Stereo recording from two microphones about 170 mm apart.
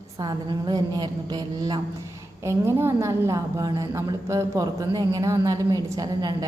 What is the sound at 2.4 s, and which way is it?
A woman's voice, 15° right (ahead or behind).